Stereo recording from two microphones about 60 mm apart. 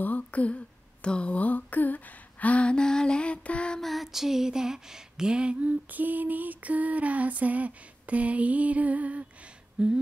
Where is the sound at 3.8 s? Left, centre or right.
Centre; by 9.3 s right.